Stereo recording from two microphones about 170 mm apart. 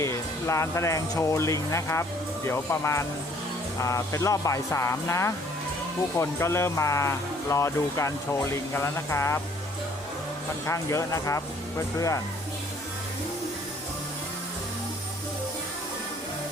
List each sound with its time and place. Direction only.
0.0 s speech: 15° left (ahead or behind)
10.7 s speech: 20° left (ahead or behind)